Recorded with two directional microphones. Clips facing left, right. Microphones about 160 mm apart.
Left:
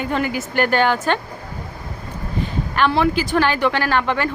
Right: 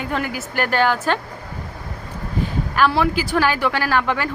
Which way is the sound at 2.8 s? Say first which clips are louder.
Left 1 dB; 5° right (ahead or behind).